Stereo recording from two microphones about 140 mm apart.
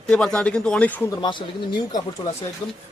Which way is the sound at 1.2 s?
35° left (ahead or behind).